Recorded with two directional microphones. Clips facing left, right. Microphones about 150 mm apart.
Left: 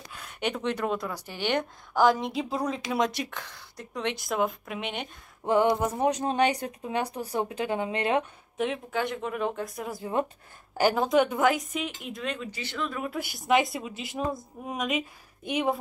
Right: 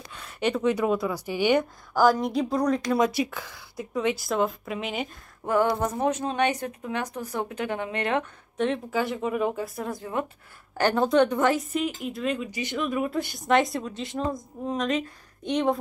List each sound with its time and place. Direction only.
0.1 s a woman's voice: centre (ahead or behind)
5.4 s speech: 20° left (ahead or behind)
8.6 s a woman's voice: centre (ahead or behind); by 13.0 s 15° right (ahead or behind)
13.0 s a woman's voice: 5° left (ahead or behind)